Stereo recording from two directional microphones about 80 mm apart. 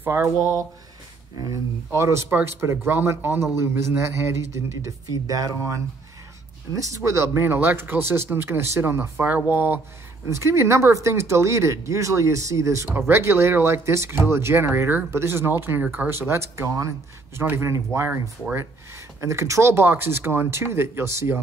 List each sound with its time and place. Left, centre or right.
0.0 s speech: right
2.0 s speech: right
6.8 s speech: right
19.2 s speech: right